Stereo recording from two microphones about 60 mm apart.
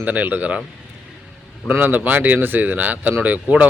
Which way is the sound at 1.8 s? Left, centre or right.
Right.